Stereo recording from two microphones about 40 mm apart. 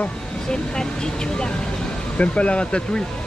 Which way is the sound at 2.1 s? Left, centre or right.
Left.